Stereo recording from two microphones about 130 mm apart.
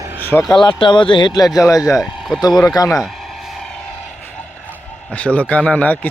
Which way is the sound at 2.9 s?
Centre (ahead or behind).